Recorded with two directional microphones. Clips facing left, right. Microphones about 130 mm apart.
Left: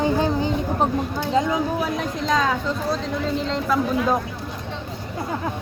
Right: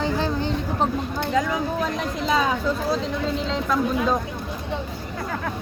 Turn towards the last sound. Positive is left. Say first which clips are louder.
# left 1 dB
turn(degrees=0)  # may be behind; listen again after turning